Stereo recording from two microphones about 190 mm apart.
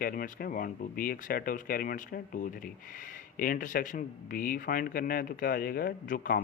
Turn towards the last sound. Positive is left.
turn(degrees=50)  # may be behind; listen again after turning